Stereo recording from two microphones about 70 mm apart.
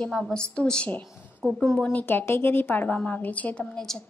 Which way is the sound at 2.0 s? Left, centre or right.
Left.